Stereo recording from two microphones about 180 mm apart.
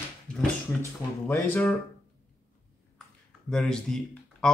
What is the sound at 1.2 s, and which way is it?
Speech, 10° left (ahead or behind).